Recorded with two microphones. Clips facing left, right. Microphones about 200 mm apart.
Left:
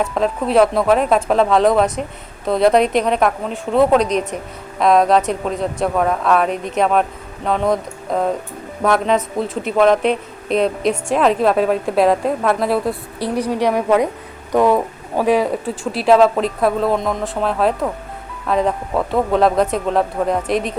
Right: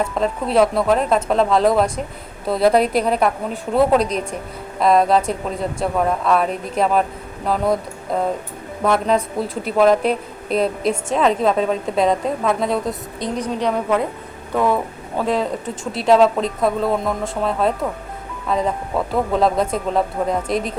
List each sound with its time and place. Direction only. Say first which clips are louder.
0.0 s a woman's voice: left 2 dB; centre (ahead or behind)
16.0 s a woman's voice: left 2 dB; centre (ahead or behind)